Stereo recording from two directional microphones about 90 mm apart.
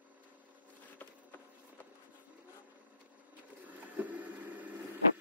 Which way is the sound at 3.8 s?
20° right (ahead or behind).